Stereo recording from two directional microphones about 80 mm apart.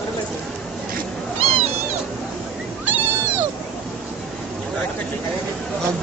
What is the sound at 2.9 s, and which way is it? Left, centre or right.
Cat, right.